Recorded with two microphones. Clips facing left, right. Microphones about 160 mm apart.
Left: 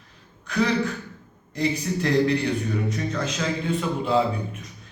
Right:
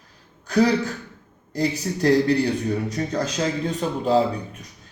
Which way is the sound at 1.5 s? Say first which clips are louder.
Right 1 dB; 35° right (ahead or behind).